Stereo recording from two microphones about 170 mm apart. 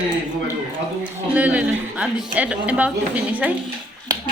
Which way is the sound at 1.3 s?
10° right (ahead or behind).